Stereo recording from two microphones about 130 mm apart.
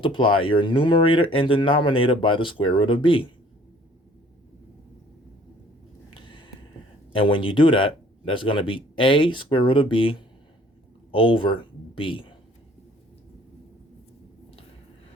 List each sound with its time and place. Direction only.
0.0 s speech: 40° left (ahead or behind)
6.1 s a sound: 40° left (ahead or behind)
7.1 s speech: 40° left (ahead or behind)